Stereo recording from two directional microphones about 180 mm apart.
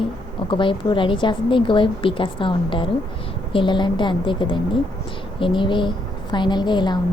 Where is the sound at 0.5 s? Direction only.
25° left (ahead or behind).